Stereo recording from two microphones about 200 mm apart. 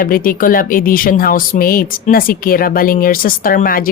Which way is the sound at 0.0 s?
45° left (ahead or behind).